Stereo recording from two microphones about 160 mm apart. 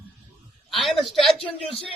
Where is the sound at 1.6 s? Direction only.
35° left (ahead or behind).